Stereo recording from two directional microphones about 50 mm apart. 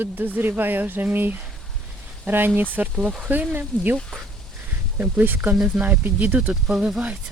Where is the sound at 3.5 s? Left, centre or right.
Right.